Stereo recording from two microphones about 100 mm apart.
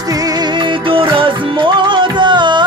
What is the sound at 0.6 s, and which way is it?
Music, 55° right (ahead or behind).